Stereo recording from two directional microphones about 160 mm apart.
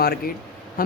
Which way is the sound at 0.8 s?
60° left (ahead or behind).